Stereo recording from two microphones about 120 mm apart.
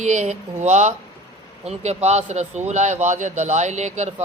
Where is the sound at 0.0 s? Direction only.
75° right (ahead or behind).